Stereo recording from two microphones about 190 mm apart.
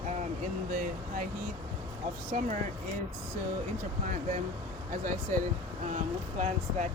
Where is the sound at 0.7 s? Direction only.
45° right (ahead or behind).